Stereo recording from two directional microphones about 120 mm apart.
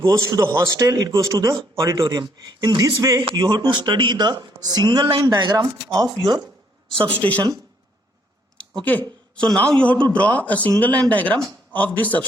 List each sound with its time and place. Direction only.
0.0 s a man's voice: 25° right (ahead or behind)
7.2 s a man's voice: 10° left (ahead or behind)
8.8 s a man's voice: 10° left (ahead or behind)